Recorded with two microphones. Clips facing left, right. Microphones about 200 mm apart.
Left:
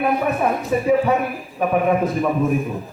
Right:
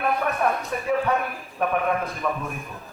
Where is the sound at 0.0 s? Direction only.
5° left (ahead or behind).